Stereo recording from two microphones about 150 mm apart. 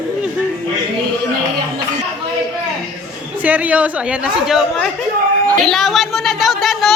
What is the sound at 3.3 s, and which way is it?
A woman's voice, 10° right (ahead or behind).